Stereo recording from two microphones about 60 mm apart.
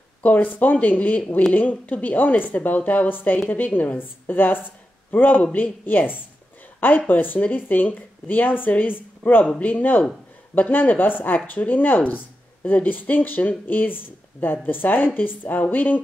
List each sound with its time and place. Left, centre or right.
0.2 s a woman's voice: left